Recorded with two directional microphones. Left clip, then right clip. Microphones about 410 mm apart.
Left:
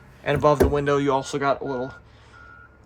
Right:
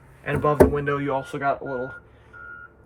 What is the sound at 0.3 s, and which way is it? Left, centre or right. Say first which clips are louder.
Speech: even; centre.